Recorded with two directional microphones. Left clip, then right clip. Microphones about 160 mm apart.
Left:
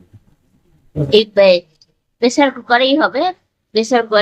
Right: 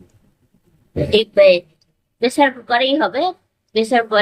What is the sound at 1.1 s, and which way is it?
A woman's voice, 30° left (ahead or behind).